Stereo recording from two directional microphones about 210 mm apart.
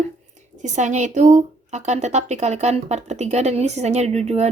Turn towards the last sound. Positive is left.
turn(degrees=-30)  # may be behind; listen again after turning